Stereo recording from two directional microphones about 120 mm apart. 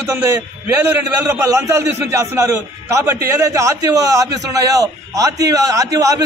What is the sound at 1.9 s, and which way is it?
A man's voice, 20° right (ahead or behind).